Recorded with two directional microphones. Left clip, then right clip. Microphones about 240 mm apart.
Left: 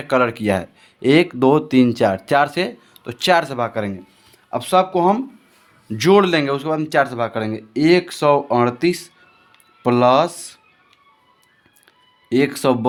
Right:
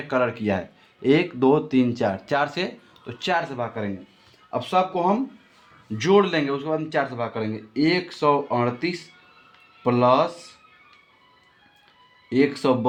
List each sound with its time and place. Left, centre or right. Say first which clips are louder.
0.1 s speech: left 6 dB; left
12.3 s speech: left 3 dB; left